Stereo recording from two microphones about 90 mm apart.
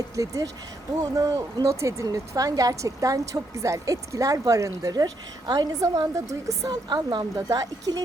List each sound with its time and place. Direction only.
0.2 s a woman's voice: 40° right (ahead or behind)
6.8 s a woman's voice: 55° right (ahead or behind)